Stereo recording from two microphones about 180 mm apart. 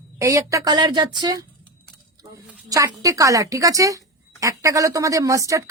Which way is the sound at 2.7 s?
20° right (ahead or behind).